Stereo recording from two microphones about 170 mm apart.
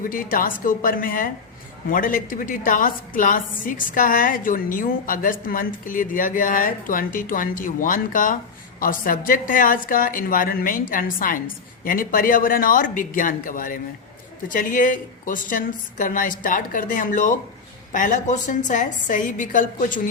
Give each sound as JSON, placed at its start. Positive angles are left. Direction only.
{"t": 0.0, "sound": "a woman's voice", "side_deg": 55}